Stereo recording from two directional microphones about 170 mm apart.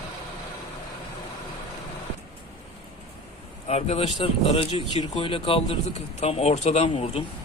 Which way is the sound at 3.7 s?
40° left (ahead or behind).